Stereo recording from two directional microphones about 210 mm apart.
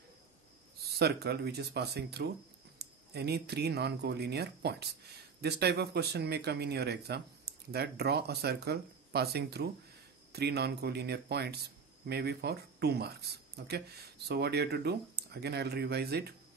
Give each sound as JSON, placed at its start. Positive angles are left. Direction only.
{"t": 0.7, "sound": "speech", "side_deg": -50}